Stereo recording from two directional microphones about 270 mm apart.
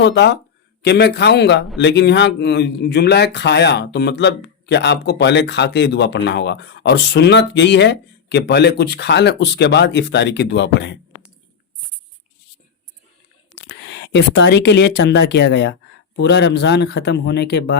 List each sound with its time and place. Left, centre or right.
0.0 s speech: left
13.6 s speech: left